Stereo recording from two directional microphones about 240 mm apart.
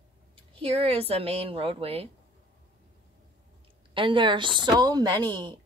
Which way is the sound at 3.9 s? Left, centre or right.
Right.